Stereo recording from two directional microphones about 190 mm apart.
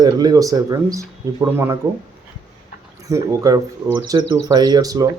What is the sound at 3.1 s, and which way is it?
Speech, 20° right (ahead or behind).